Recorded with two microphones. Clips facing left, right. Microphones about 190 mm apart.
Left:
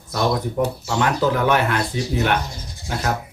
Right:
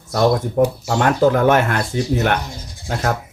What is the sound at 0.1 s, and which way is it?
Speech, 50° right (ahead or behind).